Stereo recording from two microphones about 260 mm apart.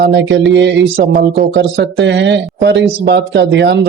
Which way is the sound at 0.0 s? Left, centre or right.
Right.